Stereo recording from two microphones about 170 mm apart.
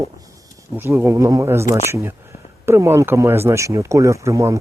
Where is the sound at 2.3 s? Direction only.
35° left (ahead or behind).